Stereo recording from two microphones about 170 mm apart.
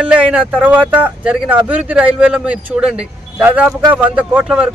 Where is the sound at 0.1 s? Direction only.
5° right (ahead or behind).